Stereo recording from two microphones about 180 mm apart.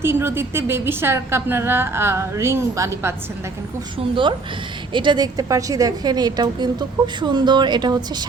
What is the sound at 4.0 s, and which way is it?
A woman's voice, 30° right (ahead or behind).